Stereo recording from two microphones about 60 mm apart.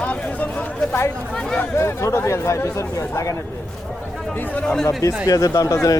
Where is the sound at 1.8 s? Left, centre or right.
Left.